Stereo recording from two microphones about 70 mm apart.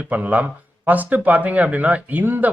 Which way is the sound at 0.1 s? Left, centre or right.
Right.